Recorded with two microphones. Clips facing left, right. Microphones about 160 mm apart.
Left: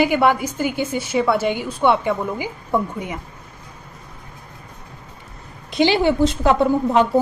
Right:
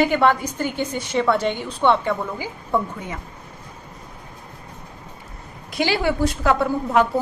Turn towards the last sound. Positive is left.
turn(degrees=20)  # may be behind; listen again after turning